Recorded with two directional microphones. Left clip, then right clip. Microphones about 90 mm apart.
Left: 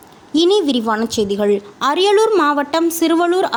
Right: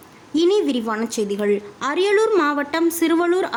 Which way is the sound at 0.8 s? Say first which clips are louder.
Left 5 dB; 40° left (ahead or behind).